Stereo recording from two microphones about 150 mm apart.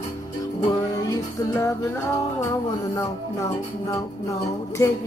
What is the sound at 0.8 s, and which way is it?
Speech, 20° left (ahead or behind).